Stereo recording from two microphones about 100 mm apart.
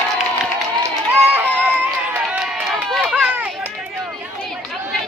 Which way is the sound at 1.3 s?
15° right (ahead or behind).